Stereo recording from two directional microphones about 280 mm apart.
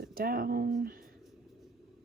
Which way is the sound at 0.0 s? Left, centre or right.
Right.